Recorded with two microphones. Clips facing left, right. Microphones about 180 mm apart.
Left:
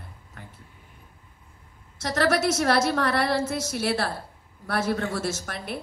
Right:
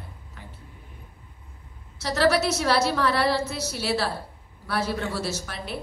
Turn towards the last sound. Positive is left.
turn(degrees=50)  # may be behind; listen again after turning